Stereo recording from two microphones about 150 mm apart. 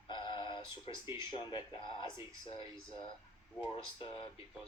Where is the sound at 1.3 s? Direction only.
35° left (ahead or behind).